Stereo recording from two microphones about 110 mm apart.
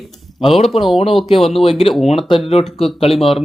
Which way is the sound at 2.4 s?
65° left (ahead or behind).